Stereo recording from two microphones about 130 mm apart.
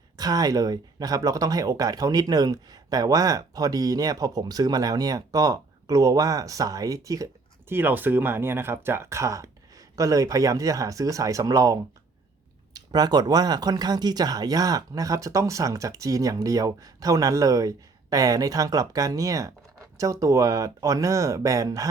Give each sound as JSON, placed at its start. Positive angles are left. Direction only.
{"t": 0.2, "sound": "speech", "side_deg": -30}